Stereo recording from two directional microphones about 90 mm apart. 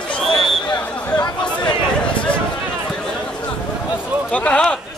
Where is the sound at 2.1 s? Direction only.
15° left (ahead or behind).